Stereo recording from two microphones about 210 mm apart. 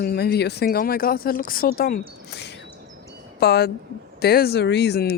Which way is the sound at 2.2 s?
55° left (ahead or behind).